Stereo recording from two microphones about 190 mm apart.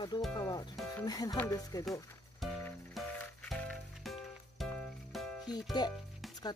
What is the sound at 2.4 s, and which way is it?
Music, centre (ahead or behind).